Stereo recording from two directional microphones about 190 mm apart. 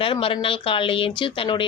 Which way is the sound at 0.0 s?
30° left (ahead or behind).